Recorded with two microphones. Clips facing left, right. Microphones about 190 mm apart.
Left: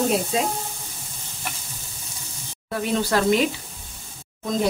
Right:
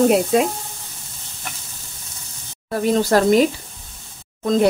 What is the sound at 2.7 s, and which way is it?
Speech, 40° right (ahead or behind).